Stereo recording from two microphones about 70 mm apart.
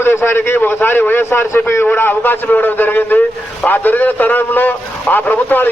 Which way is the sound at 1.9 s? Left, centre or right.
Left.